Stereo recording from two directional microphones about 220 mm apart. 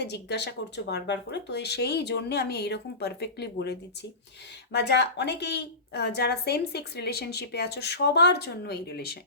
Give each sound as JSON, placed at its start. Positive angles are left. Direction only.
{"t": 0.0, "sound": "a woman's voice", "side_deg": 50}